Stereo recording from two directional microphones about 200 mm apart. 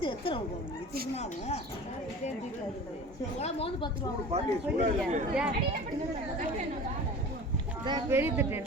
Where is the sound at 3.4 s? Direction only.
30° left (ahead or behind).